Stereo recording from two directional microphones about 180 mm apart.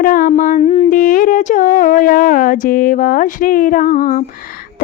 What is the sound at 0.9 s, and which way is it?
A woman's voice, 50° left (ahead or behind).